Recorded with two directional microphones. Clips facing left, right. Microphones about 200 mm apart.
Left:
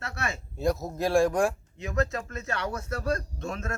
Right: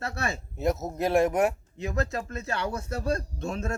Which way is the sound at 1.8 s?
35° right (ahead or behind).